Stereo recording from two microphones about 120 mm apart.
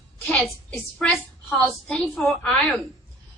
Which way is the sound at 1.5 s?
5° left (ahead or behind).